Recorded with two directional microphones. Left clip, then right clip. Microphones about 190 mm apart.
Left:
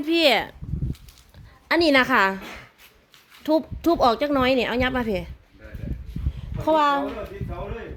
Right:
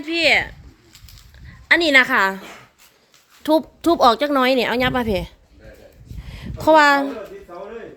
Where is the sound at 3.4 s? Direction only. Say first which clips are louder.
Right 4 dB; 20° right (ahead or behind).